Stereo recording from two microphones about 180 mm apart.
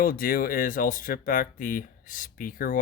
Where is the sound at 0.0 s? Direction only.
50° left (ahead or behind).